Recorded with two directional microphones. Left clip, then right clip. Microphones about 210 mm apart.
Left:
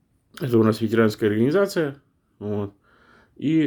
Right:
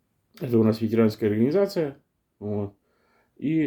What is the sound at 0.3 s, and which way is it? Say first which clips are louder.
Speech: left 3 dB; 25° left (ahead or behind).